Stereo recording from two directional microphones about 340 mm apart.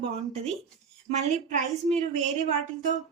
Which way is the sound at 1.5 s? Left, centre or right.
Centre.